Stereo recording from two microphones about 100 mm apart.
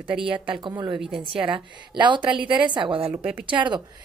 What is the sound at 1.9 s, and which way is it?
A woman's voice, 50° right (ahead or behind).